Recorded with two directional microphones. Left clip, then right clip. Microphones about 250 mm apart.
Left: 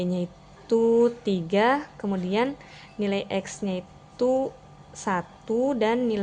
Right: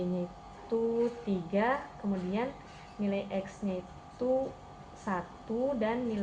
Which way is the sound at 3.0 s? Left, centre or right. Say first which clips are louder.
Left 7 dB; left.